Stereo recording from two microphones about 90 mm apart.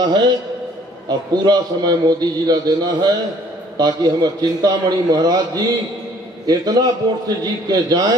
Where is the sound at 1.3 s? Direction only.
50° right (ahead or behind).